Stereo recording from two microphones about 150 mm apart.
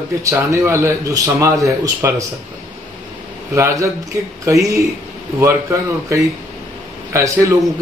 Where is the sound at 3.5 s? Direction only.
20° right (ahead or behind).